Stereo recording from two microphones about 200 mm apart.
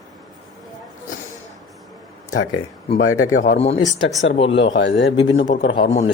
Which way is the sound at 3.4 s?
35° left (ahead or behind).